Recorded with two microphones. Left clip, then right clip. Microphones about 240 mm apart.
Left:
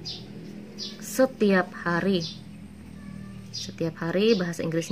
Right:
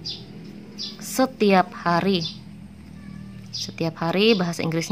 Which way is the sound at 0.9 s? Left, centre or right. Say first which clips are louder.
Even; right.